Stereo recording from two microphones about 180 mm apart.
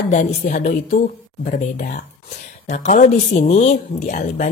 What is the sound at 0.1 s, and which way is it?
Speech, 45° left (ahead or behind).